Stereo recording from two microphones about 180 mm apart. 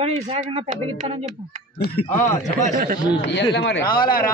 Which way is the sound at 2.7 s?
55° right (ahead or behind).